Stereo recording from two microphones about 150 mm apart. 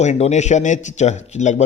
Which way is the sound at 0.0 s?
50° left (ahead or behind).